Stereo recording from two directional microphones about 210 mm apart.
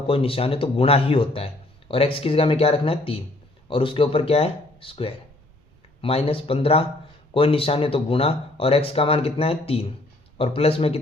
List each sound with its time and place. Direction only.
0.1 s speech: 25° left (ahead or behind)